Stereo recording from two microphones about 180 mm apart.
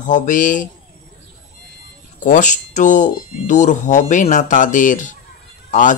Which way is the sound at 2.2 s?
45° left (ahead or behind).